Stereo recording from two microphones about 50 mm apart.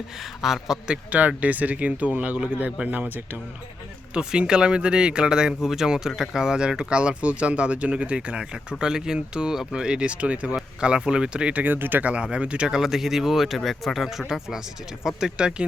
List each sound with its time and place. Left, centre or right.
0.2 s a man's voice: centre
1.4 s speech: right
3.1 s speech: right
4.1 s speech: centre
8.8 s speech: centre
11.6 s speech: right
12.0 s speech: right
12.7 s speech: centre